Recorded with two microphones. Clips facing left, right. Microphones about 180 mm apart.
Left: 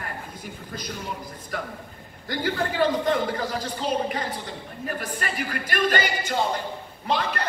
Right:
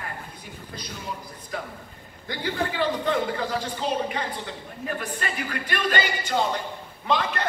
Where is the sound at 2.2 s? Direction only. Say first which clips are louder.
Left 2 dB; 45° left (ahead or behind).